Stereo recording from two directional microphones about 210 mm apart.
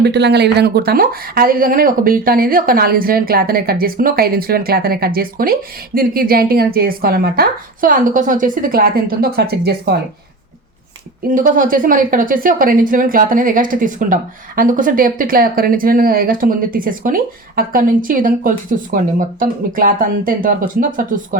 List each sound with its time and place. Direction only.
0.0 s speech: 55° right (ahead or behind)
11.3 s speech: 40° right (ahead or behind)